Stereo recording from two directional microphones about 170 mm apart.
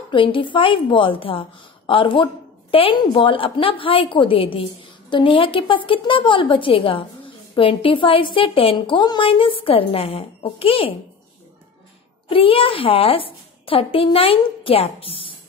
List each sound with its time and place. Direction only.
0.1 s a woman's voice: 30° left (ahead or behind)
12.3 s a woman's voice: 30° left (ahead or behind)